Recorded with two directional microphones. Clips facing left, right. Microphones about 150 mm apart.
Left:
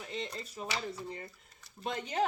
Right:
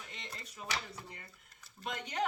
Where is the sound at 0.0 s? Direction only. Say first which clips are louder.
Left 12 dB; 30° left (ahead or behind).